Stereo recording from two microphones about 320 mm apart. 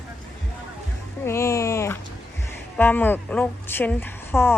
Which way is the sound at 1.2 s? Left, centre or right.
Centre.